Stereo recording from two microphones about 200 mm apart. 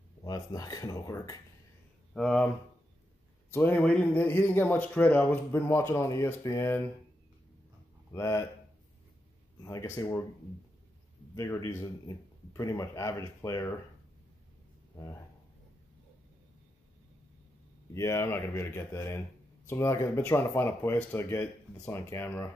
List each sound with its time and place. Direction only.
0.2 s speech: 15° left (ahead or behind)
2.1 s speech: 5° left (ahead or behind)
3.5 s speech: 10° left (ahead or behind)
8.1 s speech: 15° left (ahead or behind)
9.7 s speech: 15° left (ahead or behind)
11.3 s speech: 15° left (ahead or behind)
17.9 s speech: 15° left (ahead or behind)